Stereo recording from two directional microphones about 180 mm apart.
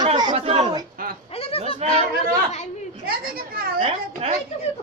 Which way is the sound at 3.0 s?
55° right (ahead or behind).